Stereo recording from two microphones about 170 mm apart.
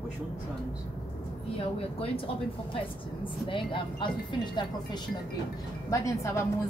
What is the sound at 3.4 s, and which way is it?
Speech, 30° left (ahead or behind).